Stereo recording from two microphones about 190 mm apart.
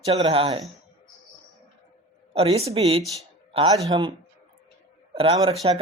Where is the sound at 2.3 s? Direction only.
30° right (ahead or behind).